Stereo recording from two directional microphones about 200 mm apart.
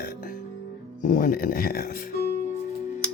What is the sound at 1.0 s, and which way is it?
Speech, 45° left (ahead or behind).